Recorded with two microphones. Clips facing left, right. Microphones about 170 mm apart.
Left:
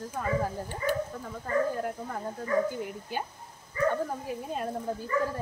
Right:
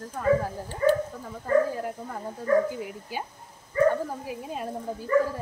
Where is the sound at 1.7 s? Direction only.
Centre (ahead or behind).